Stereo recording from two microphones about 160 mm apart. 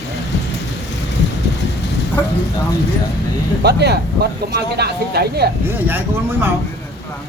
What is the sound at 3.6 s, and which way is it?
Speech, 90° right.